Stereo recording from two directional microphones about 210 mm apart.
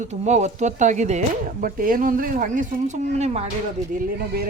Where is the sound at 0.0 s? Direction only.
35° right (ahead or behind).